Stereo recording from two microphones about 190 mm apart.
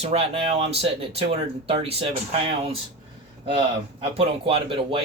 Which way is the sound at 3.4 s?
30° right (ahead or behind).